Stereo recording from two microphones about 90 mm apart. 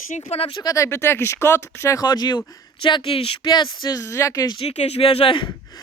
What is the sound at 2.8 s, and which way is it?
Speech, 75° left (ahead or behind).